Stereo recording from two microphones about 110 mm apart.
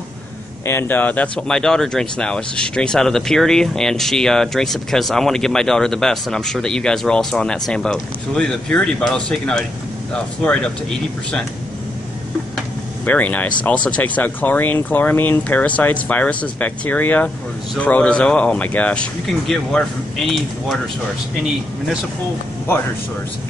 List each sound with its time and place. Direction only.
0.7 s speech: 20° left (ahead or behind)
13.0 s speech: 15° left (ahead or behind)
19.2 s speech: 5° left (ahead or behind)